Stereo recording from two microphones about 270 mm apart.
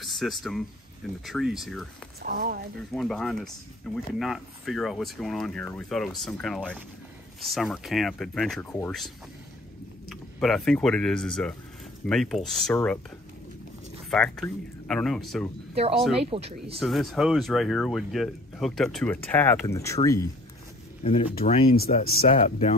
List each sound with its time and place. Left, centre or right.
0.0 s speech: centre
2.2 s speech: right
2.9 s speech: centre
14.1 s speech: centre
15.7 s speech: right
16.8 s speech: centre; by 21.3 s left
21.7 s speech: left
22.3 s speech: left